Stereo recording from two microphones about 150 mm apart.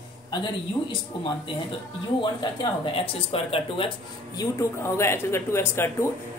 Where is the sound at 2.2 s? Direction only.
30° left (ahead or behind).